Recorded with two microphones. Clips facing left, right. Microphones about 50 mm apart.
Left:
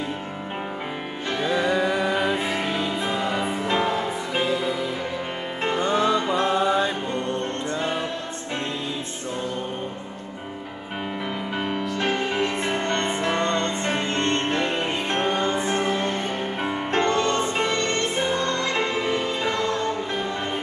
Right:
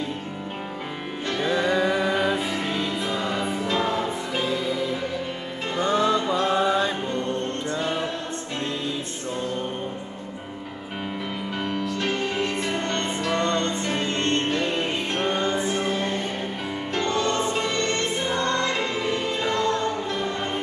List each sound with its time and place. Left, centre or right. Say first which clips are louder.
1.4 s music: even; centre
3.6 s music: left 1 dB; left
5.9 s music: right 1 dB; centre
6.5 s mantra: even; centre
7.8 s music: even; left
11.6 s music: left 1 dB; centre